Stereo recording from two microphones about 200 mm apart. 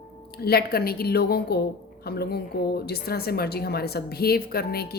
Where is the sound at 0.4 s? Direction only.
50° left (ahead or behind).